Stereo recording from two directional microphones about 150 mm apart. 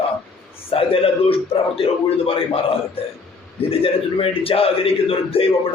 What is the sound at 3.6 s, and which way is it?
A man's voice, 40° left (ahead or behind).